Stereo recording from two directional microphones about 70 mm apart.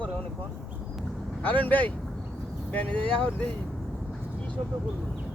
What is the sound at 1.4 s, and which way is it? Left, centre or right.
Speech, left.